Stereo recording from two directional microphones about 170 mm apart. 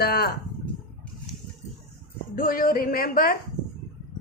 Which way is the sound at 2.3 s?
55° left (ahead or behind).